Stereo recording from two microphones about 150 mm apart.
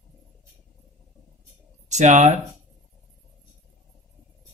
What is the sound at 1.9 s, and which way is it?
Speech, 55° right (ahead or behind).